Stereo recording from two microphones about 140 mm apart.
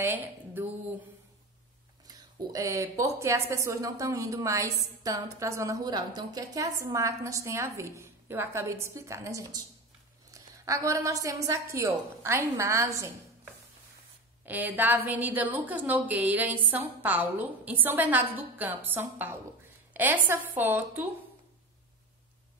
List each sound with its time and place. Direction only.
0.0 s a sound: 15° right (ahead or behind)
2.0 s a woman's voice: 25° right (ahead or behind)
14.4 s a woman's voice: 10° right (ahead or behind)